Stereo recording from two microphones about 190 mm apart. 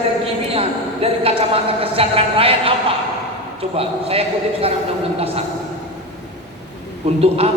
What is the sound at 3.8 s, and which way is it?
Speech, 30° right (ahead or behind).